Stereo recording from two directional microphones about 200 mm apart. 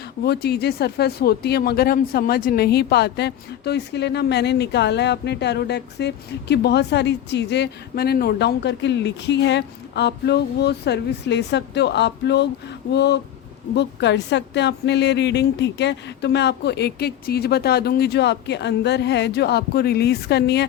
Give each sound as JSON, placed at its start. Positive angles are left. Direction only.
{"t": 0.3, "sound": "speech", "side_deg": 55}